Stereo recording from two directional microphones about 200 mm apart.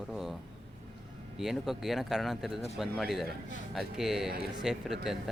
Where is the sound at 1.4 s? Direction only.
Centre (ahead or behind).